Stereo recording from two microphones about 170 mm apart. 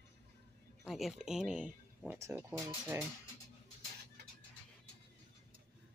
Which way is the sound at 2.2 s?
15° right (ahead or behind).